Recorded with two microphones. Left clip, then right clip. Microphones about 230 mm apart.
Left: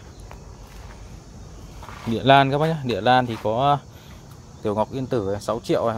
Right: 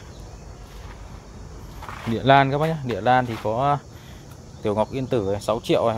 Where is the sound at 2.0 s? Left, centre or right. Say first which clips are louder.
Left 1 dB; centre.